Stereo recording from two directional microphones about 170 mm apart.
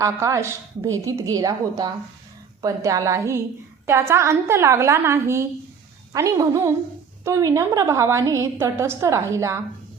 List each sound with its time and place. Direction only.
0.0 s a woman's voice: 15° right (ahead or behind)